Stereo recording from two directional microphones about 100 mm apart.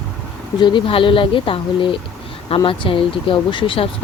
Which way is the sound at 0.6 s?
50° left (ahead or behind).